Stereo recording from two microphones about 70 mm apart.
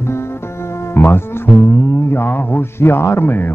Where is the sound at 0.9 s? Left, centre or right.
Left.